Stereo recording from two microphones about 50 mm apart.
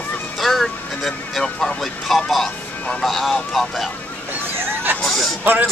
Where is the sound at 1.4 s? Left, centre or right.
Centre.